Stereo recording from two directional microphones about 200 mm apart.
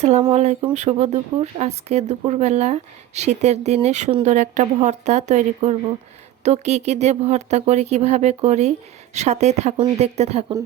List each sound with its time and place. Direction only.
0.0 s speech: 30° right (ahead or behind)